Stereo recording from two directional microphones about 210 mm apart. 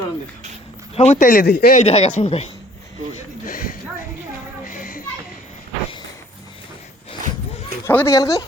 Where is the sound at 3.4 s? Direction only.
40° left (ahead or behind).